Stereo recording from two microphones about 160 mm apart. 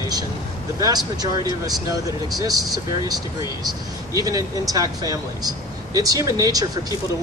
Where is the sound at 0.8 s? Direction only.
25° right (ahead or behind).